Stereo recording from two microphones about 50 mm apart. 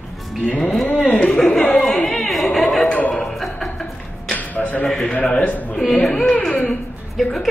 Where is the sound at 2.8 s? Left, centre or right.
Left.